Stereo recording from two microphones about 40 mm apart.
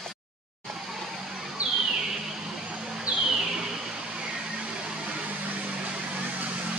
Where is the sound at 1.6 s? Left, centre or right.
Right.